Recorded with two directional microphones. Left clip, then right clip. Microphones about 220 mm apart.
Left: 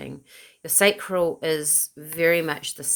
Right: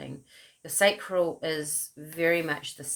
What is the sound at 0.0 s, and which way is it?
Speech, 40° left (ahead or behind).